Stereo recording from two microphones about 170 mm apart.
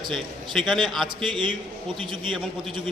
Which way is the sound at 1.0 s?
30° right (ahead or behind).